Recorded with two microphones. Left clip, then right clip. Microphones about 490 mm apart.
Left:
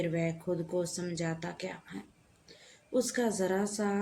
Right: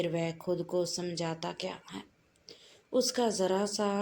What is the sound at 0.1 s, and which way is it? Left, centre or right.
Speech, left.